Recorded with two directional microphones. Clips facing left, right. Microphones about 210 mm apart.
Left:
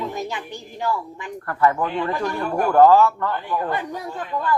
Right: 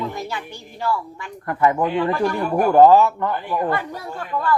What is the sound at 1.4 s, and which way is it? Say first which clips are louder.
A man's voice: right 2 dB; 15° right (ahead or behind).